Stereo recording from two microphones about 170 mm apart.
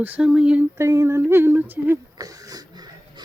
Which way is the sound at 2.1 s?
20° right (ahead or behind).